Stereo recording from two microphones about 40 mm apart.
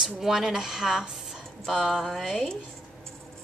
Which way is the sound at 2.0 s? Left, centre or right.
Centre.